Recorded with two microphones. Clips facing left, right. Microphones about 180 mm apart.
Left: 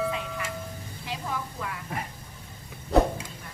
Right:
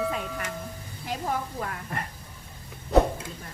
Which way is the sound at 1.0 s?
45° right (ahead or behind).